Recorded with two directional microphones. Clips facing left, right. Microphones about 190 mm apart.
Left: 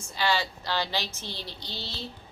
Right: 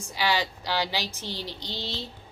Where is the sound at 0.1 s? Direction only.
15° right (ahead or behind).